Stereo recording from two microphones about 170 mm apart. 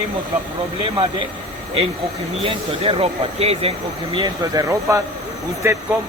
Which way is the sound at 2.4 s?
35° right (ahead or behind).